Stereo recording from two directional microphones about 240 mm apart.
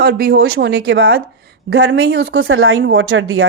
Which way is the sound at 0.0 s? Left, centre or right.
Right.